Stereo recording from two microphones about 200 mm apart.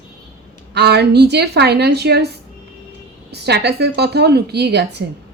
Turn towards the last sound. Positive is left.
turn(degrees=-55)  # may be behind; listen again after turning